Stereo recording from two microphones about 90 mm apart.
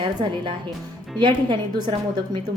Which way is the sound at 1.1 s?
60° right (ahead or behind).